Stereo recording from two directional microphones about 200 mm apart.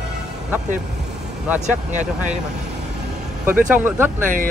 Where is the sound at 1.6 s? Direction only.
40° right (ahead or behind).